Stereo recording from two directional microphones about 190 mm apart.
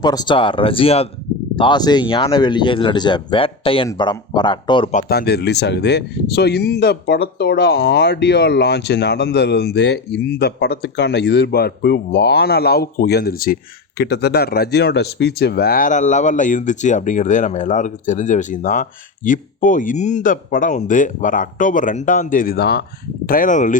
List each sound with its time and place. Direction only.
0.0 s speech: 20° left (ahead or behind)
4.9 s speech: 50° left (ahead or behind)